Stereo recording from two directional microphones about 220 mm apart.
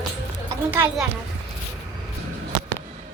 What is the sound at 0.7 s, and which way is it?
Speech, 10° right (ahead or behind).